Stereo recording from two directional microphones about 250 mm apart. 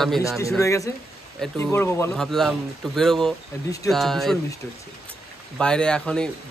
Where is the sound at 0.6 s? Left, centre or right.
Centre.